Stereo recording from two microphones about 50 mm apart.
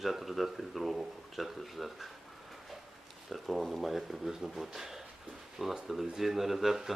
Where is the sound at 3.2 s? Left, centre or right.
Centre.